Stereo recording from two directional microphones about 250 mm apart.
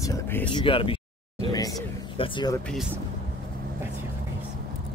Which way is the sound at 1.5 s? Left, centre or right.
Centre.